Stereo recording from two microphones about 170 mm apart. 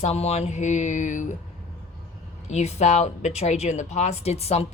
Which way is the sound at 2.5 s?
40° left (ahead or behind).